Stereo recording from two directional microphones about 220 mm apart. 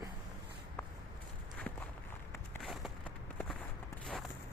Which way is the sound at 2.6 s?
Centre (ahead or behind).